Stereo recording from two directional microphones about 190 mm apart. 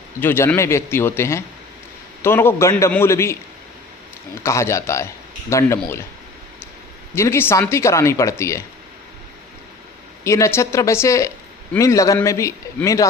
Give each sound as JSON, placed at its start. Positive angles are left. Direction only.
{"t": 0.2, "sound": "speech", "side_deg": 10}
{"t": 4.4, "sound": "speech", "side_deg": 15}
{"t": 7.2, "sound": "speech", "side_deg": 15}
{"t": 10.2, "sound": "speech", "side_deg": 15}